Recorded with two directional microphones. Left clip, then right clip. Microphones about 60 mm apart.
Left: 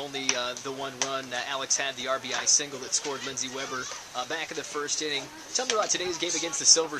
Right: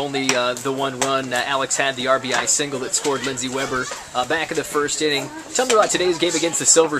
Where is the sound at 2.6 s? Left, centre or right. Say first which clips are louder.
Right 7 dB; left.